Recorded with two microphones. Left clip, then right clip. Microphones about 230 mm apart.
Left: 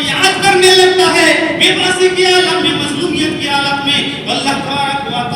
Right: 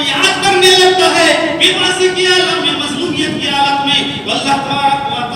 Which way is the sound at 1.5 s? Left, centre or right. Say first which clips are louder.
Even; centre.